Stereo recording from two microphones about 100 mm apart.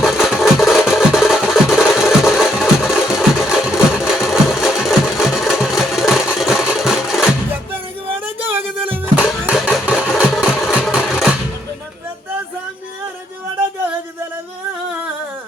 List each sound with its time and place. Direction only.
0.1 s music: 5° right (ahead or behind)
5.2 s engine: 5° right (ahead or behind)
8.2 s music: 20° right (ahead or behind)
9.5 s engine: 5° right (ahead or behind)